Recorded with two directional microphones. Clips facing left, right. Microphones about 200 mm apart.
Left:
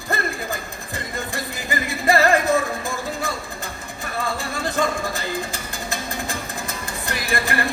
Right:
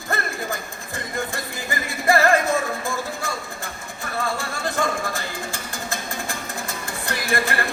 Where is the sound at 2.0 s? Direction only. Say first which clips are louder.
Even; 20° left (ahead or behind).